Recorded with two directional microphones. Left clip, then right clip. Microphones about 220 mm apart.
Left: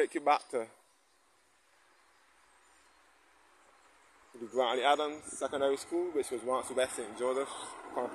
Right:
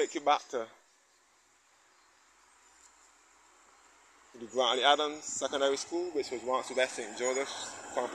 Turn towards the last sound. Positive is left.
turn(degrees=-45)  # may be behind; listen again after turning